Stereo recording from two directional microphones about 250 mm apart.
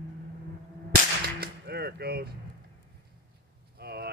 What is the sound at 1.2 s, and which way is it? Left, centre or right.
Whip, right.